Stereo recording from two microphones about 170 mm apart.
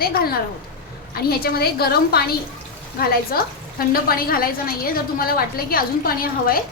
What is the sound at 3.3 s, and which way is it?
A woman's voice, 60° left (ahead or behind).